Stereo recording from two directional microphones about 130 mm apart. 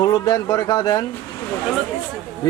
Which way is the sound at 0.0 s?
30° left (ahead or behind).